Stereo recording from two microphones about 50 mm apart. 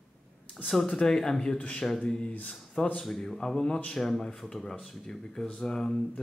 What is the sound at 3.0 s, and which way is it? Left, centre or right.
Speech, centre.